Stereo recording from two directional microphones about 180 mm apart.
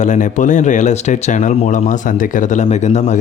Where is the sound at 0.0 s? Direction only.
45° left (ahead or behind).